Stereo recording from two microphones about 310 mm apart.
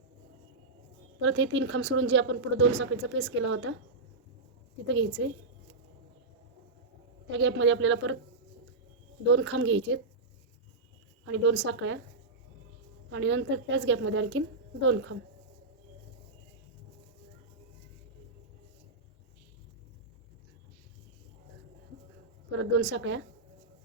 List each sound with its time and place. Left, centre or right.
1.2 s a woman's voice: right
4.9 s a woman's voice: right
7.3 s a woman's voice: right
9.2 s a woman's voice: right
11.3 s a woman's voice: right
13.1 s a woman's voice: right
22.5 s a woman's voice: right